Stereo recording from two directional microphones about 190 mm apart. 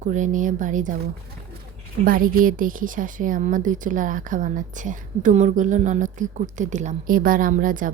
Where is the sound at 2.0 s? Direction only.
50° right (ahead or behind).